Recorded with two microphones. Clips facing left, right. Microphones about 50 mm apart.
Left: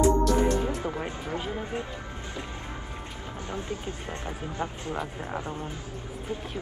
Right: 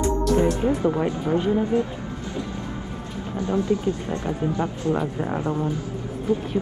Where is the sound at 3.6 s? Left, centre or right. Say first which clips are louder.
Right 12 dB; left.